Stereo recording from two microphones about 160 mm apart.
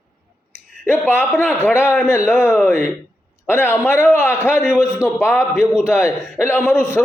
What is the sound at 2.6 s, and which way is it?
A man's voice, 15° left (ahead or behind).